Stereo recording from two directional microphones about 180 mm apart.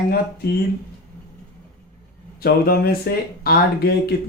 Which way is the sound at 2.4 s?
60° left (ahead or behind).